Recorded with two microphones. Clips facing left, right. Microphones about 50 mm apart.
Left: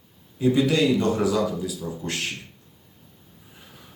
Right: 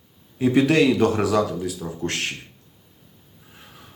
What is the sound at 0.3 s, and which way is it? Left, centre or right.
A man's voice, right.